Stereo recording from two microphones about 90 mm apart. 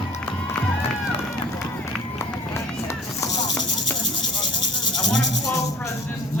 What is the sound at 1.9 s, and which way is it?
Run, 10° left (ahead or behind).